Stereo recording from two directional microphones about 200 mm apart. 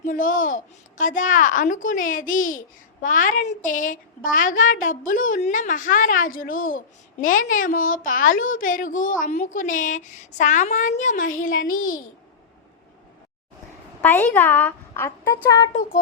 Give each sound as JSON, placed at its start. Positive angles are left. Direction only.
{"t": 0.0, "sound": "a child's voice", "side_deg": 40}
{"t": 14.0, "sound": "a woman's voice", "side_deg": 10}